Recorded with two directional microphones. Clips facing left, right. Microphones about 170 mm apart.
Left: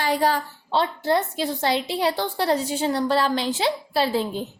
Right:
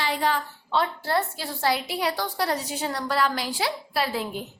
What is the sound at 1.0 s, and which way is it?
A child's voice, 20° left (ahead or behind).